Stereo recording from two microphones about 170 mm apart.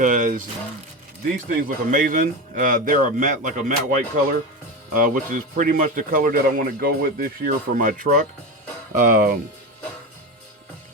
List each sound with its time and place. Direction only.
0.0 s speech: 50° right (ahead or behind)